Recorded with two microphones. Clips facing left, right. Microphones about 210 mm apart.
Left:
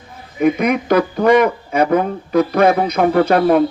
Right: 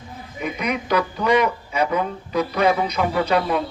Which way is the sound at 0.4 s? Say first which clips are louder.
Left 10 dB; 50° left (ahead or behind).